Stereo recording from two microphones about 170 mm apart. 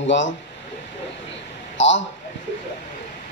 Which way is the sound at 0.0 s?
90° left.